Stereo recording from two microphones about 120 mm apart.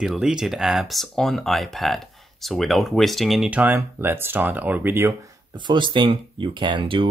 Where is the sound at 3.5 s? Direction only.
15° right (ahead or behind).